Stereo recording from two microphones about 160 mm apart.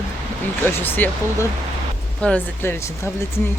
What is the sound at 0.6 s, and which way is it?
Speech, 15° left (ahead or behind).